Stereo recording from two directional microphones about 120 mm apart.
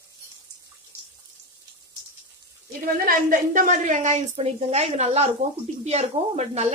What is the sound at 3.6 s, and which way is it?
A woman's voice, 90° right.